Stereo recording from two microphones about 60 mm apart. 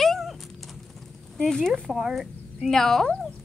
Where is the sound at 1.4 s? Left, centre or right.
Centre.